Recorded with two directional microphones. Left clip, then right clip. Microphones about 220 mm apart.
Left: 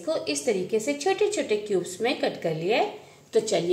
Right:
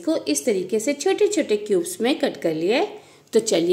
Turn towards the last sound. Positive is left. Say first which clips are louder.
# right 5 dB
turn(degrees=-50)  # may be behind; listen again after turning